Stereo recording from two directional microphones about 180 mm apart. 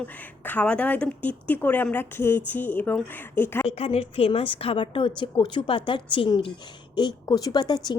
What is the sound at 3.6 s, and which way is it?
Speech, 35° left (ahead or behind).